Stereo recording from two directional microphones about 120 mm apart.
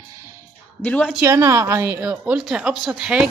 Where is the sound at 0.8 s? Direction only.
10° left (ahead or behind).